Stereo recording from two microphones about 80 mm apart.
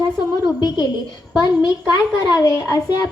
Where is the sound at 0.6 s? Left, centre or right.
Left.